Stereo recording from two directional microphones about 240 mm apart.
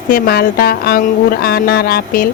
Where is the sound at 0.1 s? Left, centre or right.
Left.